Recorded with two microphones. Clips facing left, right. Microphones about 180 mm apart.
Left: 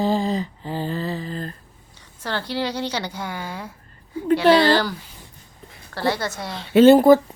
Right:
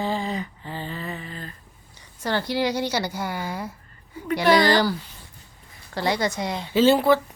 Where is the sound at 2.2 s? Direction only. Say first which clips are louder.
Right 2 dB; 10° right (ahead or behind).